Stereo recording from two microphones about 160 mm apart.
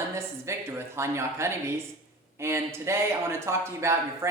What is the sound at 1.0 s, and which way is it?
A woman's voice, 15° right (ahead or behind).